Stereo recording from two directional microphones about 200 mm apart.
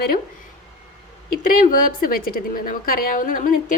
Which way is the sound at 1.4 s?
45° left (ahead or behind).